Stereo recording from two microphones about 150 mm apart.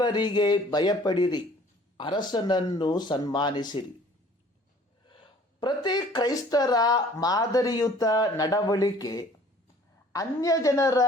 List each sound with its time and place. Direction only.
0.0 s speech: 30° left (ahead or behind)
5.0 s speech: 30° left (ahead or behind)